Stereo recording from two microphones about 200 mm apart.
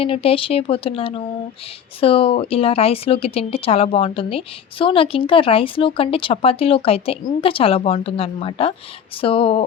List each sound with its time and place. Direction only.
0.0 s speech: 30° left (ahead or behind)